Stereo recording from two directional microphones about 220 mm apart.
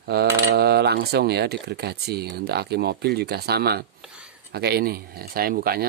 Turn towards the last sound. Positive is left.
turn(degrees=-45)  # may be behind; listen again after turning